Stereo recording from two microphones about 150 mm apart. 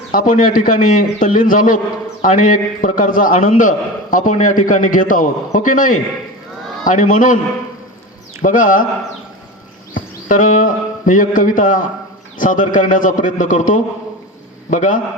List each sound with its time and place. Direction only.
0.1 s a man's voice: 60° left (ahead or behind)
8.4 s a man's voice: 65° left (ahead or behind)
9.9 s a man's voice: 60° left (ahead or behind)